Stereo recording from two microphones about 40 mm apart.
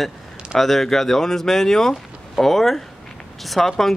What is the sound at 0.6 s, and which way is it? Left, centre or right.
Speech, centre.